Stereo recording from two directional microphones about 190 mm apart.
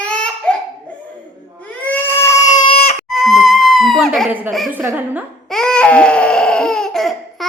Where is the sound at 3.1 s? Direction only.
Centre (ahead or behind).